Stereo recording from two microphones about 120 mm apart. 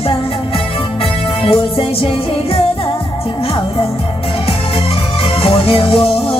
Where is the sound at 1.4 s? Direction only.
50° left (ahead or behind).